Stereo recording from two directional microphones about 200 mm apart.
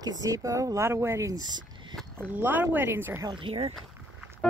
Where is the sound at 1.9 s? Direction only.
Centre (ahead or behind).